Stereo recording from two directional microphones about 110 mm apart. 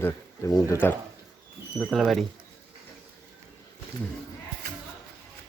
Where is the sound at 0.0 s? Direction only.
25° left (ahead or behind).